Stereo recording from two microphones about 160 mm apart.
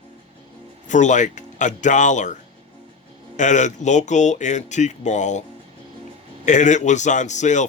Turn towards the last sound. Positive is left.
turn(degrees=50)  # may be behind; listen again after turning